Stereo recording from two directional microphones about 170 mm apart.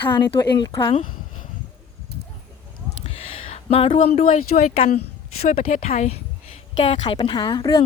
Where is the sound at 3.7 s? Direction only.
35° left (ahead or behind).